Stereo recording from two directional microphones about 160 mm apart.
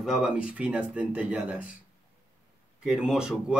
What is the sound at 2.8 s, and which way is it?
Speech, 5° right (ahead or behind).